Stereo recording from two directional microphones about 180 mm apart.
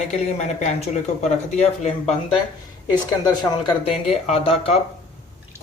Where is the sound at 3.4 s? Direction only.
25° left (ahead or behind).